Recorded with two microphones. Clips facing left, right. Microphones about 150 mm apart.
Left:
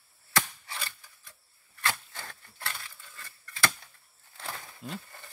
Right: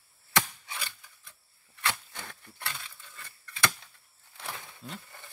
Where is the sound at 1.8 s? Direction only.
20° right (ahead or behind).